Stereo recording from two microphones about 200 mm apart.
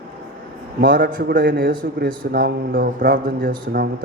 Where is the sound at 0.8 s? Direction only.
45° right (ahead or behind).